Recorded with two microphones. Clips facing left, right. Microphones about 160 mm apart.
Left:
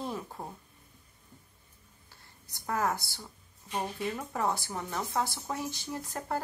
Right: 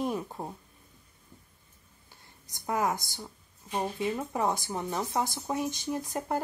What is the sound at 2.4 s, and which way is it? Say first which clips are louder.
Speech: right 2 dB; 15° right (ahead or behind).